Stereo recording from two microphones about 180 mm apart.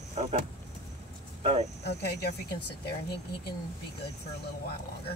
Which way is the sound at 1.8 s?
65° left (ahead or behind).